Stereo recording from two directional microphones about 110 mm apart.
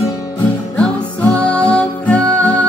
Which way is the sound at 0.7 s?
10° left (ahead or behind).